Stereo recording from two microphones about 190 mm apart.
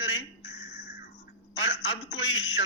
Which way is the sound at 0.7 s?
60° left (ahead or behind).